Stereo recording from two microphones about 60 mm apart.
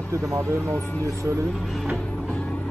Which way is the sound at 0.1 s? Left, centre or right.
Right.